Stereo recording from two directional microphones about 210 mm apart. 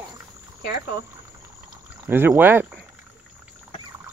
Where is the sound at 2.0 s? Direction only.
10° right (ahead or behind).